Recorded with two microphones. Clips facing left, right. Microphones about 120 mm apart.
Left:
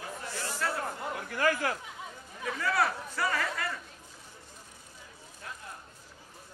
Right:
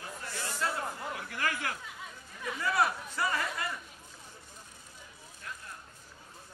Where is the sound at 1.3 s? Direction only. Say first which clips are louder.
Left 8 dB; 35° left (ahead or behind).